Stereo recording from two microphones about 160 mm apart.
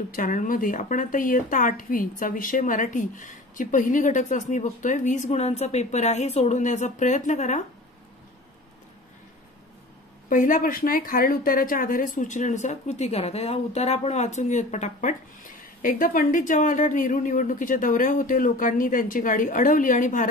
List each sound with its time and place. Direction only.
0.1 s speech: 55° left (ahead or behind)
10.3 s speech: 55° left (ahead or behind)